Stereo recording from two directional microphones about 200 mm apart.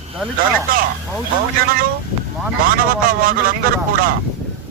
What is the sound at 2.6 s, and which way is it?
A man's voice, 45° right (ahead or behind).